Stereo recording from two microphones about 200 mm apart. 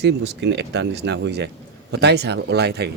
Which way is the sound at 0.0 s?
60° right (ahead or behind).